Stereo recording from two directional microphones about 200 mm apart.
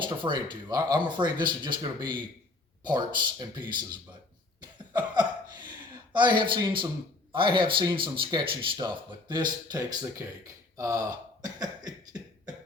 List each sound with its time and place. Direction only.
0.0 s speech: 25° right (ahead or behind)
5.6 s speech: 20° right (ahead or behind)
10.8 s cough: 15° right (ahead or behind)